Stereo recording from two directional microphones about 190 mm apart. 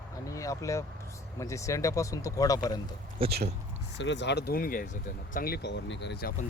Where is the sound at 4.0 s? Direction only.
70° left (ahead or behind).